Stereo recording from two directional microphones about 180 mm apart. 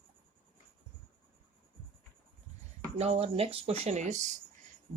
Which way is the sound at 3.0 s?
35° right (ahead or behind).